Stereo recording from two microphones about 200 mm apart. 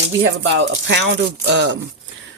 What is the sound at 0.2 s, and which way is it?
Speech, 60° right (ahead or behind).